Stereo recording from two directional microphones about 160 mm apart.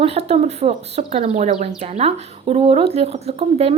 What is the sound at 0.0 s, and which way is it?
A woman's voice, 40° right (ahead or behind).